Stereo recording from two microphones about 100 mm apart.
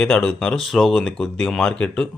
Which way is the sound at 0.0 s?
5° left (ahead or behind).